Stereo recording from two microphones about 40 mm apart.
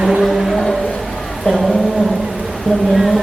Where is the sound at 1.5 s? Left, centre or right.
Left.